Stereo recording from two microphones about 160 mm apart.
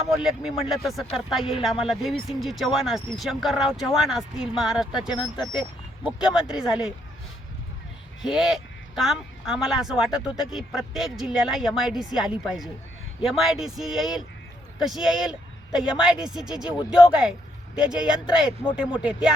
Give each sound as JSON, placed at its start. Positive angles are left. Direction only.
{"t": 0.1, "sound": "speech", "side_deg": -5}
{"t": 8.2, "sound": "speech", "side_deg": 0}
{"t": 17.8, "sound": "speech", "side_deg": -5}